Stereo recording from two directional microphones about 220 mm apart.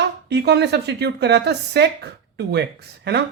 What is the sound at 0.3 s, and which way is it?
Speech, 50° right (ahead or behind).